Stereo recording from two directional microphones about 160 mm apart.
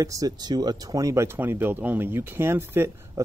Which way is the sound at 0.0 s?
20° right (ahead or behind).